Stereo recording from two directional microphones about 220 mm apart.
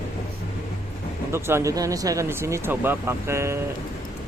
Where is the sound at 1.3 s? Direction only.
10° right (ahead or behind).